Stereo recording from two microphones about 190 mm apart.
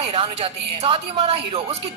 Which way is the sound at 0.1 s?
30° right (ahead or behind).